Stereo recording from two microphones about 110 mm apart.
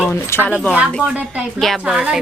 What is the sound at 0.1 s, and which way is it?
Speech, 20° left (ahead or behind).